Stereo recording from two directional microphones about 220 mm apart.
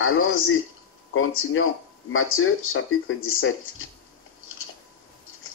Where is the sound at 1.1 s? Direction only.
65° left (ahead or behind).